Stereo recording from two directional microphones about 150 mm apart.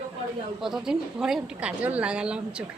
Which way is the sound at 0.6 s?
5° right (ahead or behind).